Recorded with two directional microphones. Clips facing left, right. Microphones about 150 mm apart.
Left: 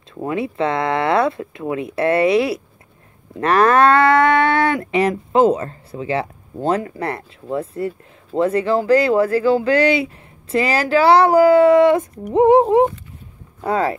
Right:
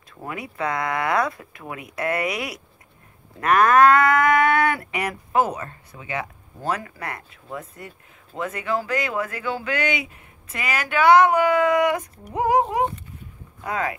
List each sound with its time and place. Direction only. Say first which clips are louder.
0.2 s speech: left 8 dB; 25° left (ahead or behind)